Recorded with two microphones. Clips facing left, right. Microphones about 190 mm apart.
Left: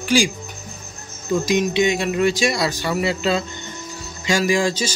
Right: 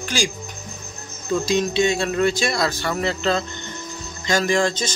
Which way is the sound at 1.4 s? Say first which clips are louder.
Left 1 dB; 15° left (ahead or behind).